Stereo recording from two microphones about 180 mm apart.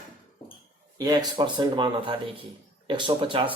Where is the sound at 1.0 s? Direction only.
20° right (ahead or behind).